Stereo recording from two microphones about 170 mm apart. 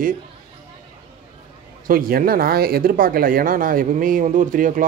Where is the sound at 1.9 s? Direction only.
55° right (ahead or behind).